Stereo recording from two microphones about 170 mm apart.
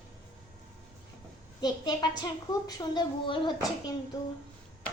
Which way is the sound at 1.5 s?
25° left (ahead or behind).